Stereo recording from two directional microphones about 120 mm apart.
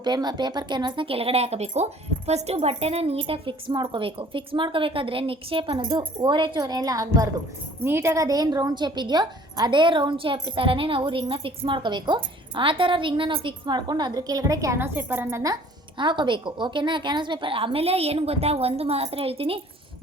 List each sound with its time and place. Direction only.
0.0 s a woman's voice: 35° right (ahead or behind)
16.0 s speech: 40° right (ahead or behind)